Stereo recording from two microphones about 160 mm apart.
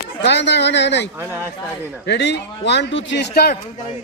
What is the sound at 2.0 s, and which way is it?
Speech, 90° left.